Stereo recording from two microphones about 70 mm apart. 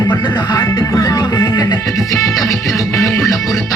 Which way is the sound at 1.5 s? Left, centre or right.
Left.